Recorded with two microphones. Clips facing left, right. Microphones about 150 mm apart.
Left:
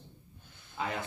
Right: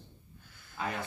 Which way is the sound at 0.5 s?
20° left (ahead or behind).